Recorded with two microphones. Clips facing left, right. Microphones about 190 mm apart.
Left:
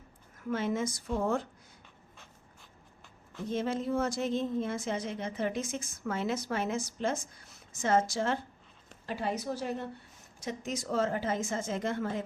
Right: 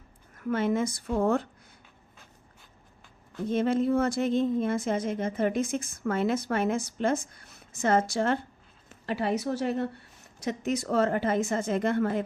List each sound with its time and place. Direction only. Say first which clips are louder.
0.3 s a woman's voice: right 5 dB; 60° right (ahead or behind)
3.5 s a woman's voice: right 6 dB; 60° right (ahead or behind)